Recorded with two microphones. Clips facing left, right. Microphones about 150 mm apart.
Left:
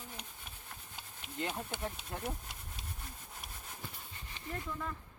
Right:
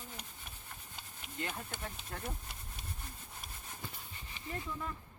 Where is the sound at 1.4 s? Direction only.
20° left (ahead or behind).